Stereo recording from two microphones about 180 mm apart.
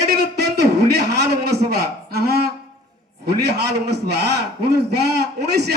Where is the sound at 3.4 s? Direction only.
65° right (ahead or behind).